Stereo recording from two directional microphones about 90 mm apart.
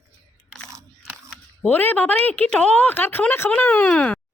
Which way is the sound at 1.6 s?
20° left (ahead or behind).